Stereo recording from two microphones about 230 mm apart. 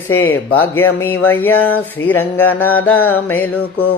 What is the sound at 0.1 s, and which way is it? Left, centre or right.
Music, centre.